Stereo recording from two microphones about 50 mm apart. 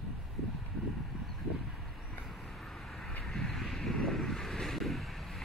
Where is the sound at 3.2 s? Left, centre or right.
Centre.